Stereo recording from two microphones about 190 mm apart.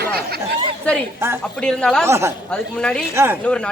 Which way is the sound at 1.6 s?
5° left (ahead or behind).